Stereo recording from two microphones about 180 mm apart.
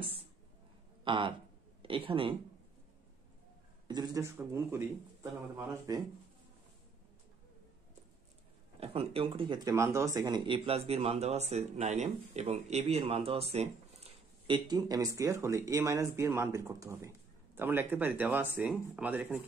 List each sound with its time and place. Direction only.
1.0 s a man's voice: 30° right (ahead or behind)
3.8 s speech: 25° right (ahead or behind)
8.7 s speech: 35° right (ahead or behind)
14.7 s speech: 20° right (ahead or behind)